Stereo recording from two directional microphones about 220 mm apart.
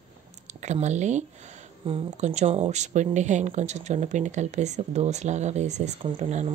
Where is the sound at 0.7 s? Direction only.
30° right (ahead or behind).